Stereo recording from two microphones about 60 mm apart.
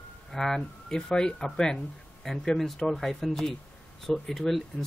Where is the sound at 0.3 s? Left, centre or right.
Centre.